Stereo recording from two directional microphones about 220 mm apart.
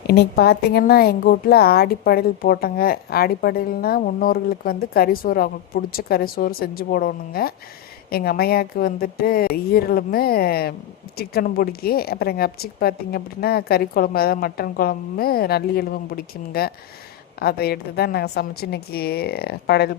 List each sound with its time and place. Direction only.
0.1 s a woman's voice: 45° left (ahead or behind)